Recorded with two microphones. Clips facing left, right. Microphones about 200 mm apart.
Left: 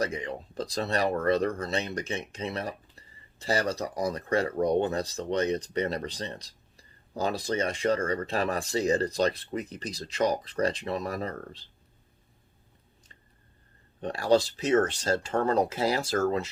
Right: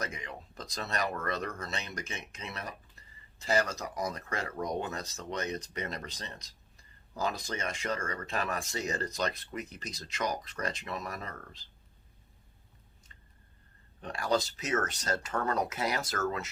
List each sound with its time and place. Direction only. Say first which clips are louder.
0.0 s speech: left 9 dB; 30° left (ahead or behind)
14.0 s speech: left 7 dB; 30° left (ahead or behind)